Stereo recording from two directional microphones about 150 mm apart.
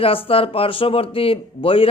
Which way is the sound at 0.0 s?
40° left (ahead or behind).